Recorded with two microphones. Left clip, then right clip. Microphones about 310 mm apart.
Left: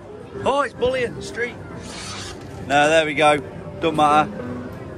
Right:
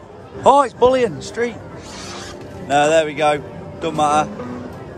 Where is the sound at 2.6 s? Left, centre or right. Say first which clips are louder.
Right 2 dB; centre.